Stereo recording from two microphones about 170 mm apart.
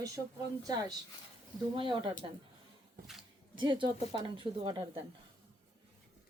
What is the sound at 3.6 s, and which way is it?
Speech, 25° right (ahead or behind).